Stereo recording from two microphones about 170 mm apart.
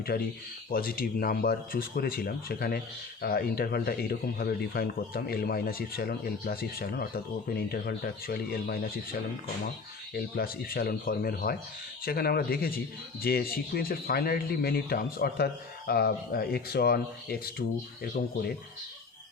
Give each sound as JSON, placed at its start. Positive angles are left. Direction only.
{"t": 0.1, "sound": "speech", "side_deg": 70}
{"t": 10.2, "sound": "speech", "side_deg": 60}